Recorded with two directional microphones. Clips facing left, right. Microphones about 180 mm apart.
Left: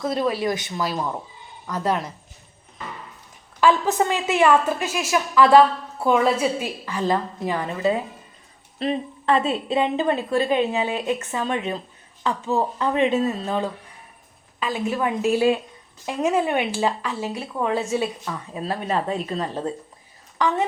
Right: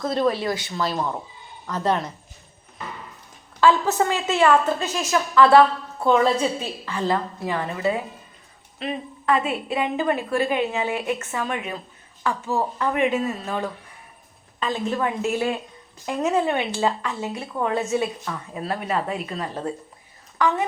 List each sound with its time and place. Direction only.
0.0 s a woman's voice: 10° left (ahead or behind)
3.6 s a woman's voice: 15° left (ahead or behind)
8.8 s a woman's voice: 30° left (ahead or behind)
13.1 s speech: 35° left (ahead or behind)
14.6 s a woman's voice: 10° left (ahead or behind)